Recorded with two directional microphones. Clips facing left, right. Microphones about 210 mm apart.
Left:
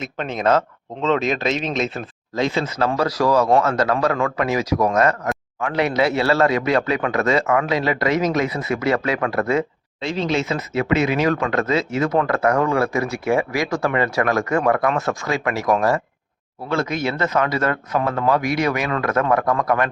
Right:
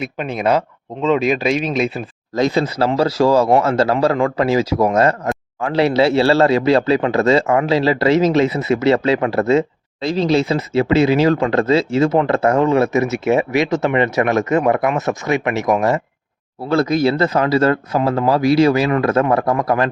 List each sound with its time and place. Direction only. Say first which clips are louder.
0.0 s speech: right 2 dB; 10° right (ahead or behind)
2.3 s speech: right 5 dB; 40° right (ahead or behind); by 16.0 s 20° right (ahead or behind)
16.6 s speech: right 7 dB; 35° right (ahead or behind)